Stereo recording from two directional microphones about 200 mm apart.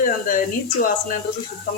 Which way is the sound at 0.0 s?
45° left (ahead or behind).